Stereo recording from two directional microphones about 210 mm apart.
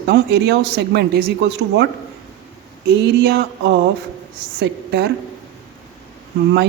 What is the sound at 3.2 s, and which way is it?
Speech, 55° right (ahead or behind).